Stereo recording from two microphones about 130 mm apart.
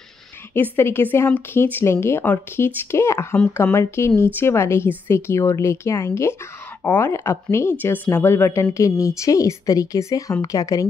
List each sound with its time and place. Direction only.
0.6 s a woman's voice: 15° left (ahead or behind)